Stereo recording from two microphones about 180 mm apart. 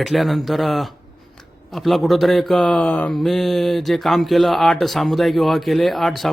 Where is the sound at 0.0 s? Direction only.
Centre (ahead or behind).